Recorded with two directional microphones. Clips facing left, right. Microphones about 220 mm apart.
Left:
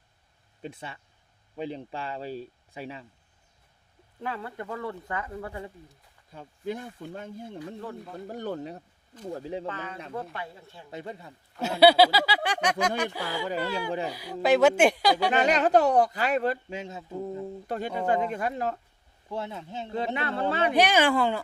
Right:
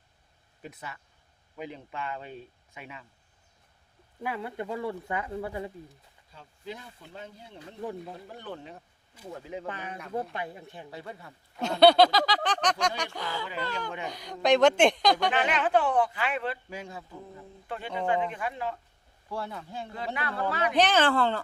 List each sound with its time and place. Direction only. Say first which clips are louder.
0.6 s speech: left 3 dB; 30° left (ahead or behind)
4.2 s speech: right 1 dB; 15° right (ahead or behind)
6.3 s speech: left 8 dB; 50° left (ahead or behind); by 9.6 s 35° left (ahead or behind)
9.6 s speech: left 2 dB; 15° right (ahead or behind)
10.9 s speech: left 7 dB; 20° left (ahead or behind)
11.6 s speech: even; 5° left (ahead or behind)
15.3 s speech: left 4 dB; 40° left (ahead or behind)
16.6 s speech: left 3 dB; 25° left (ahead or behind)
17.7 s speech: left 2 dB; 40° left (ahead or behind)
19.3 s speech: left 2 dB; 20° left (ahead or behind)
20.7 s speech: even; 10° left (ahead or behind)